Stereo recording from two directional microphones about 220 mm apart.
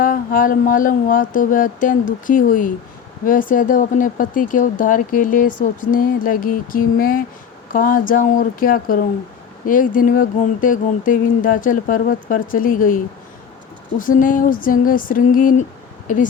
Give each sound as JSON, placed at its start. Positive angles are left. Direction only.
{"t": 0.0, "sound": "speech", "side_deg": 40}
{"t": 14.0, "sound": "speech", "side_deg": 40}